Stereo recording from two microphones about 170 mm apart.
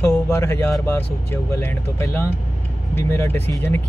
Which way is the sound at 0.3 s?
15° left (ahead or behind).